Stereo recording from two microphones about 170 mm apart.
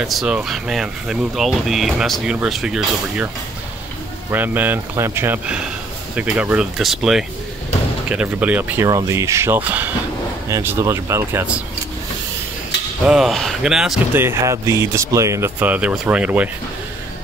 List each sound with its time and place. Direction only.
0.0 s speech: centre (ahead or behind)
4.3 s speech: 10° right (ahead or behind)
13.0 s speech: 5° right (ahead or behind)
14.1 s speech: 15° right (ahead or behind)